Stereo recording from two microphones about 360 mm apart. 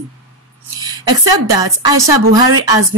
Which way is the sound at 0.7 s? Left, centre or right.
Centre.